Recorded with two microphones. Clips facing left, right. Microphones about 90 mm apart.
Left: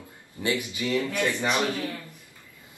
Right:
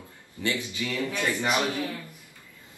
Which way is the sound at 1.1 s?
15° right (ahead or behind).